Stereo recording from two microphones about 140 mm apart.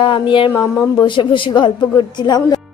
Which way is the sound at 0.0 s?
35° left (ahead or behind).